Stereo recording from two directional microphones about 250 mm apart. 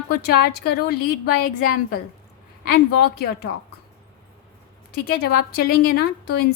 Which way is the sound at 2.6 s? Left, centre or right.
Left.